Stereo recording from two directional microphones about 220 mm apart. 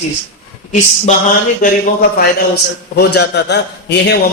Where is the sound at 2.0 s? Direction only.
45° left (ahead or behind).